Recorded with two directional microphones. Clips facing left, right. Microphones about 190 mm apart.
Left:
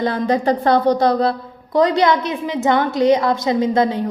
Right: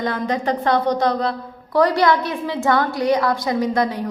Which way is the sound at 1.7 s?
20° left (ahead or behind).